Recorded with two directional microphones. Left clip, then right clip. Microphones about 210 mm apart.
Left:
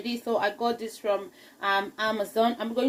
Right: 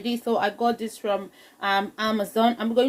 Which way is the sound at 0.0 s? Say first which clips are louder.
Right 3 dB; 40° right (ahead or behind).